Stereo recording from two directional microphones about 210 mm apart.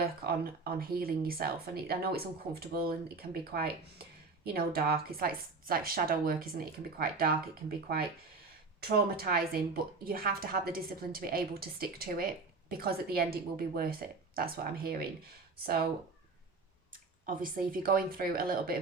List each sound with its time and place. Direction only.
0.0 s speech: 45° right (ahead or behind)
8.8 s speech: 45° right (ahead or behind)
17.2 s speech: 40° right (ahead or behind)